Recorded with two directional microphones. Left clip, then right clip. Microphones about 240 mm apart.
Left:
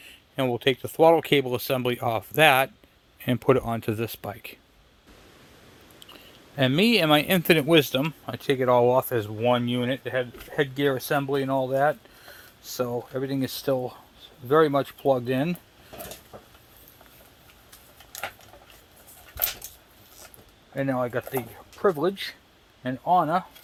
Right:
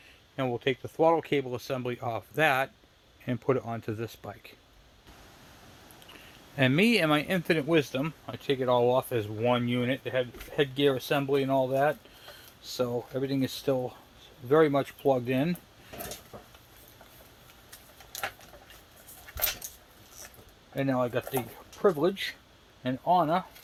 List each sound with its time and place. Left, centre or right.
0.3 s speech: left
6.6 s speech: centre
20.7 s speech: centre